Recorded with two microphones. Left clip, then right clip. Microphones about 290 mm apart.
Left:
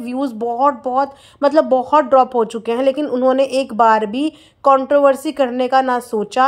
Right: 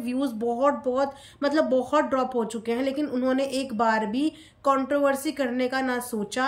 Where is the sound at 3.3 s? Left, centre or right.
Centre.